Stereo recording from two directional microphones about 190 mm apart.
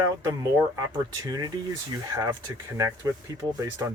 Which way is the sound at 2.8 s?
15° right (ahead or behind).